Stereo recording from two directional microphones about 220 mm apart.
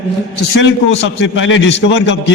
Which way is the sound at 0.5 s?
55° left (ahead or behind).